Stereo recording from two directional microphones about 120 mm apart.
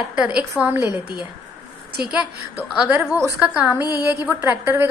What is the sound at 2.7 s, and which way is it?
A woman's voice, 5° right (ahead or behind).